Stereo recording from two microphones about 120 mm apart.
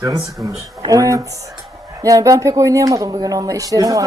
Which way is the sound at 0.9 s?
30° right (ahead or behind).